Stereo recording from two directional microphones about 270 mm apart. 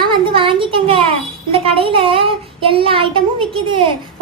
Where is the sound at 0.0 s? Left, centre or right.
Centre.